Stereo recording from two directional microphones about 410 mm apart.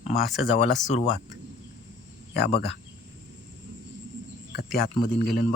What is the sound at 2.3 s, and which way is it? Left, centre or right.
Speech, centre.